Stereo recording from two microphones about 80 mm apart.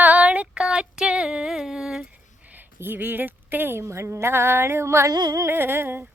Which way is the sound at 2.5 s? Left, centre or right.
Right.